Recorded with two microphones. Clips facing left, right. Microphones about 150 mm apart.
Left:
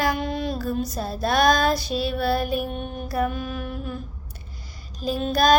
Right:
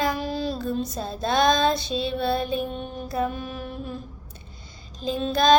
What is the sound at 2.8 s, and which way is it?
Music, 30° right (ahead or behind).